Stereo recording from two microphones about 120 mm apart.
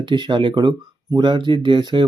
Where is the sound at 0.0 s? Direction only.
40° right (ahead or behind).